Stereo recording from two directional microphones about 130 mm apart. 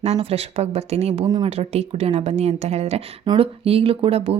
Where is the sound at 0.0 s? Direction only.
50° right (ahead or behind).